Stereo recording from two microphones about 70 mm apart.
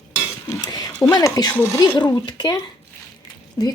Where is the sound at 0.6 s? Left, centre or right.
Left.